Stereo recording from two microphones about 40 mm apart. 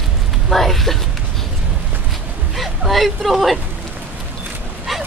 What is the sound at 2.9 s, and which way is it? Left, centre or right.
Speech, centre.